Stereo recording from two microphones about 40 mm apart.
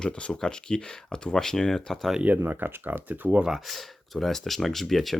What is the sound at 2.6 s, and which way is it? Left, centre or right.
Speech, right.